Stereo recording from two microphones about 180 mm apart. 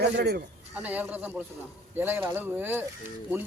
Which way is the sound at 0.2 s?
65° right (ahead or behind).